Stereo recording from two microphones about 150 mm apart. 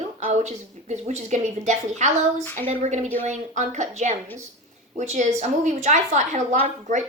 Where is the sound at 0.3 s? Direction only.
50° right (ahead or behind).